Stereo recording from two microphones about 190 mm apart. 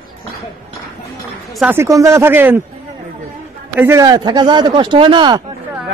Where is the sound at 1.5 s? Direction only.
10° right (ahead or behind).